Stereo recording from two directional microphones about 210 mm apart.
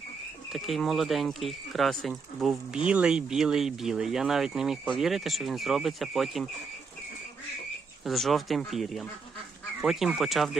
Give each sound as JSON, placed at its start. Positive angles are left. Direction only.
{"t": 0.5, "sound": "speech", "side_deg": 0}
{"t": 8.0, "sound": "speech", "side_deg": 0}